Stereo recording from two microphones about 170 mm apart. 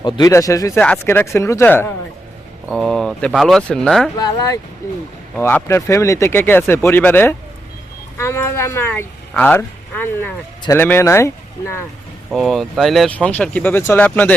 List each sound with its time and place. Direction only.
0.0 s speech: 20° left (ahead or behind)
0.8 s speech: 10° left (ahead or behind)
2.6 s speech: centre (ahead or behind)
4.2 s speech: 20° left (ahead or behind)
5.3 s speech: 10° left (ahead or behind)
12.3 s speech: centre (ahead or behind)